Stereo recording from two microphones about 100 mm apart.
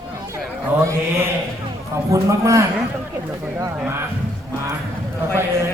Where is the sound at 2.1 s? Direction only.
30° right (ahead or behind).